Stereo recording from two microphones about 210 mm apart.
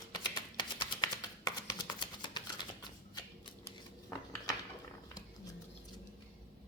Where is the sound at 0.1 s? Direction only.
20° left (ahead or behind).